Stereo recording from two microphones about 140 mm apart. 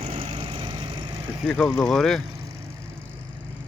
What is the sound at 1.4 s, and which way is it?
Speech, 5° left (ahead or behind).